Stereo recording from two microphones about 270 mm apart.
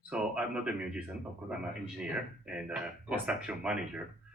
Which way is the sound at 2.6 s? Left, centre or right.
Centre.